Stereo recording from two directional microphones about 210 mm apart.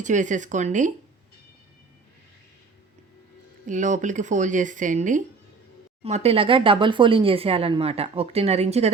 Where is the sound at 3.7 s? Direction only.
35° right (ahead or behind).